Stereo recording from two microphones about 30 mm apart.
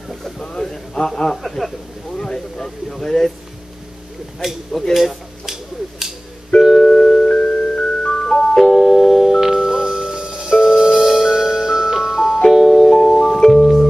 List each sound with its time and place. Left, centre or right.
0.4 s a man's voice: left
2.6 s a sound: centre
4.9 s a sound: centre
6.6 s music: centre
7.2 s music: left
8.6 s music: centre
9.5 s music: right
13.0 s music: centre